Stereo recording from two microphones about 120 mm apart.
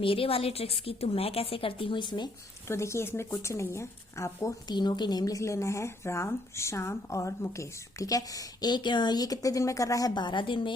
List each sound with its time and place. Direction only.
0.0 s a woman's voice: 50° left (ahead or behind)
2.6 s speech: 25° left (ahead or behind)
4.7 s speech: 35° left (ahead or behind)